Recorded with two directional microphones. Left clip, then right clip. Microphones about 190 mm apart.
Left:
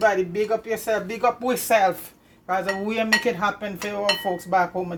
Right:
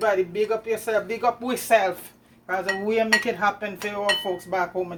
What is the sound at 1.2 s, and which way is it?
Speech, 40° left (ahead or behind).